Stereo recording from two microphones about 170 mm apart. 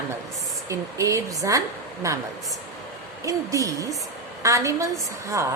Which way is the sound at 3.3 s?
20° right (ahead or behind).